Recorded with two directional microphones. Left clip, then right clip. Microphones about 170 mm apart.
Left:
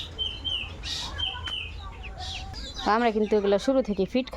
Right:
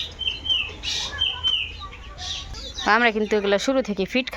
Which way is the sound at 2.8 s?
5° left (ahead or behind).